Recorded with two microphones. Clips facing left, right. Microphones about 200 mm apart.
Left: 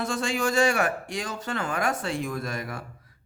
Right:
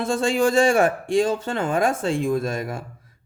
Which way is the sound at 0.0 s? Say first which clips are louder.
Right 7 dB; 30° right (ahead or behind).